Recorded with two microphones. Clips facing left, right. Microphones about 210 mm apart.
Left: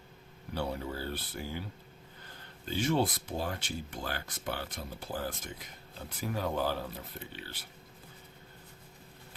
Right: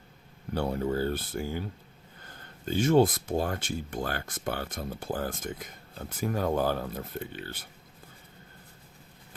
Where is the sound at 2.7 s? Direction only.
45° right (ahead or behind).